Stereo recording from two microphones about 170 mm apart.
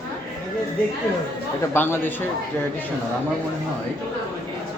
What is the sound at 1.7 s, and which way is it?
Speech, 10° left (ahead or behind).